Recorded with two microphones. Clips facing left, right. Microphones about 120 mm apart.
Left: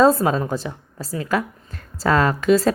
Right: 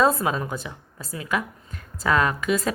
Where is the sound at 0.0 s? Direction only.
35° left (ahead or behind).